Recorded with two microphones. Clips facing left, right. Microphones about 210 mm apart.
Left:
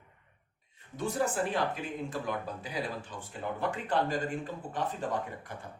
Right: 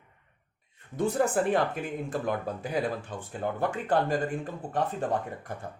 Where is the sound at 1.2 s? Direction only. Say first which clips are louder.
Right 4 dB; 50° right (ahead or behind).